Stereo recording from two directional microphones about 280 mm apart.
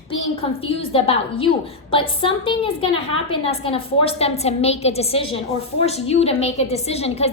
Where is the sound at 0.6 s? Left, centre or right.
Centre.